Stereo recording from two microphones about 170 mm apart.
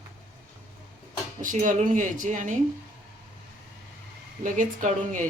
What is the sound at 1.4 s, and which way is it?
Speech, 50° right (ahead or behind).